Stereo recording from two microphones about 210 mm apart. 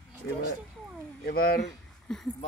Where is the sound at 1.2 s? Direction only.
45° left (ahead or behind).